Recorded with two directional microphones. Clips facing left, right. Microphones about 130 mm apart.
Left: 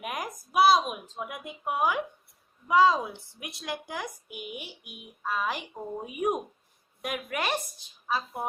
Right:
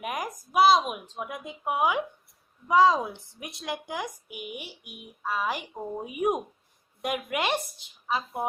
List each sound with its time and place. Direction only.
0.0 s a sound: centre (ahead or behind)
1.0 s a woman's voice: 20° right (ahead or behind)
4.8 s a child's voice: 55° right (ahead or behind)
5.2 s a woman's voice: 10° right (ahead or behind)